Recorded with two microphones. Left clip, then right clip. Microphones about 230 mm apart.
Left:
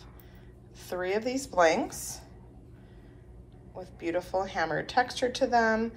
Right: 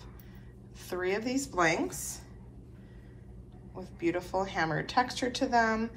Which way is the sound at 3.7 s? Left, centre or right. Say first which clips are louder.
Even; centre.